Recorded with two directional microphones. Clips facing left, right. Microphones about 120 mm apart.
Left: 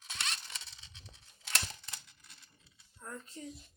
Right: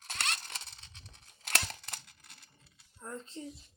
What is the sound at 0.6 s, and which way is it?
Tearing, 50° right (ahead or behind).